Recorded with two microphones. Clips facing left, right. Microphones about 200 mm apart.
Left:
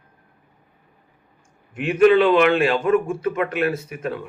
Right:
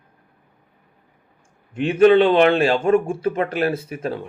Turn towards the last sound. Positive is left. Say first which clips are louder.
# right 1 dB
turn(degrees=-30)  # may be behind; listen again after turning